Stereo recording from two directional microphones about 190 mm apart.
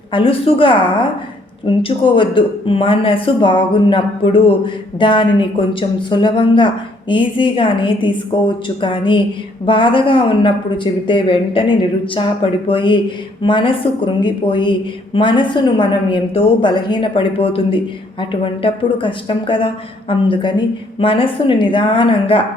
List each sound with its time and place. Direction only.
0.1 s speech: 30° left (ahead or behind)